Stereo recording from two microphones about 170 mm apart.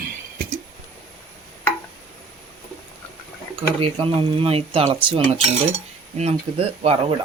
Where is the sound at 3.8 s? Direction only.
30° right (ahead or behind).